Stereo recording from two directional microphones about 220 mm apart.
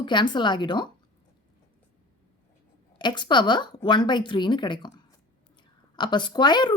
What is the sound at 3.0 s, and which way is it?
Speech, 20° left (ahead or behind).